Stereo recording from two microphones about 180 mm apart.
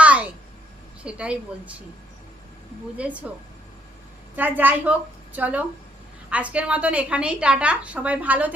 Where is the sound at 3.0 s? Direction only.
5° right (ahead or behind).